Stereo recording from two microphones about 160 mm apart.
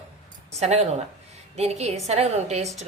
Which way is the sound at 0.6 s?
40° right (ahead or behind).